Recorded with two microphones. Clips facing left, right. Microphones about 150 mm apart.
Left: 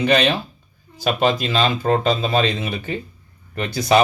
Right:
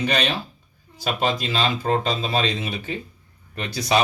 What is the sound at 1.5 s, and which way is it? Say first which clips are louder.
Speech: left 4 dB; 50° left (ahead or behind).